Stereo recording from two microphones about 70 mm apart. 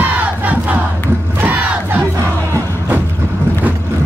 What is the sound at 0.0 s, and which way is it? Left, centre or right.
Crowd, right.